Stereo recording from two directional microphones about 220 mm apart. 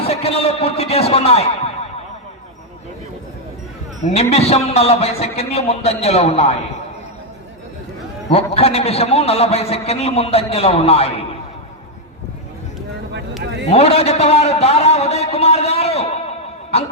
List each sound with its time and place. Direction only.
0.0 s a man's voice: 25° left (ahead or behind)
4.0 s a man's voice: 30° left (ahead or behind)
8.3 s a man's voice: 30° left (ahead or behind)
13.7 s a man's voice: 25° left (ahead or behind)